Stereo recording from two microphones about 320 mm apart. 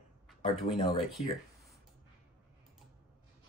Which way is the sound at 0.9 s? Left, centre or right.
Centre.